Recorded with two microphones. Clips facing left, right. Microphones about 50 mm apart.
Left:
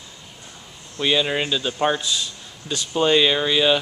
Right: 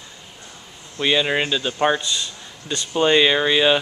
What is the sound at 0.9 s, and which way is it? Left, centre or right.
Speech, centre.